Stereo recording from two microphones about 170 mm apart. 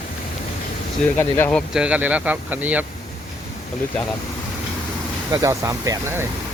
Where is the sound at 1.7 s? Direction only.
5° right (ahead or behind).